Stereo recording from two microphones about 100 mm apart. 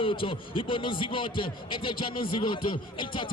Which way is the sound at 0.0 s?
60° left (ahead or behind).